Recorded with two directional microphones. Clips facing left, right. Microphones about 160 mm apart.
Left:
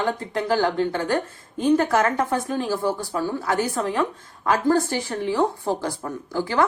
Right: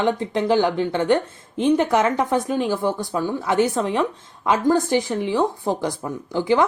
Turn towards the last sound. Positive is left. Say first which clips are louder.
# right 3 dB
turn(degrees=-20)  # may be behind; listen again after turning